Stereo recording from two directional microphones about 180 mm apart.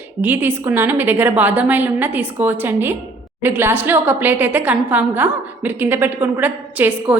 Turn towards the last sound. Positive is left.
turn(degrees=-10)  # may be behind; listen again after turning